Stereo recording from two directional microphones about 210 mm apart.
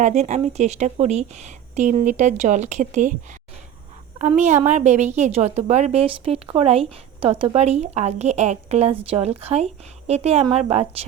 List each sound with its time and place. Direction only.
0.0 s a woman's voice: 35° right (ahead or behind)
4.2 s a woman's voice: 35° right (ahead or behind)